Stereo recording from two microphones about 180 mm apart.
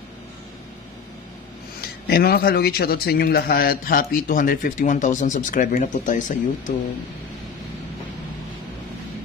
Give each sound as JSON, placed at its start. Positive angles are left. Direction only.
{"t": 1.8, "sound": "a man's voice", "side_deg": 60}